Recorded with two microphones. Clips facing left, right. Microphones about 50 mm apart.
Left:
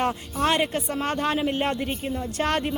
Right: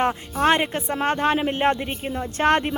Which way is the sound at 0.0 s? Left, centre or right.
Right.